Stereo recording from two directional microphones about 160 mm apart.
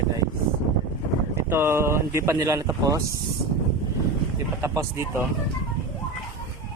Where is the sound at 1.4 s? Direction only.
15° right (ahead or behind).